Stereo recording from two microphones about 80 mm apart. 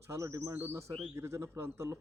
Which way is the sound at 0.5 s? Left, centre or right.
Right.